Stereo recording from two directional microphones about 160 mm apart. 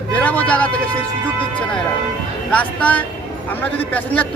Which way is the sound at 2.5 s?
10° left (ahead or behind).